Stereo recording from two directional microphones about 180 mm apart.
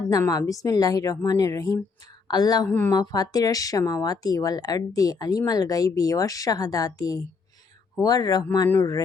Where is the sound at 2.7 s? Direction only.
10° left (ahead or behind).